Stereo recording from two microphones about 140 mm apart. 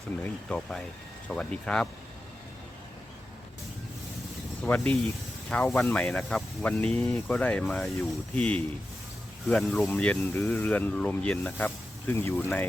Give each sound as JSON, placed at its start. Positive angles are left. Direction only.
{"t": 0.2, "sound": "speech", "side_deg": 10}
{"t": 4.6, "sound": "speech", "side_deg": 10}